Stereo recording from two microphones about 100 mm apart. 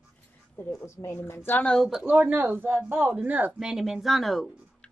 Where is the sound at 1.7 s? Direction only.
Centre (ahead or behind).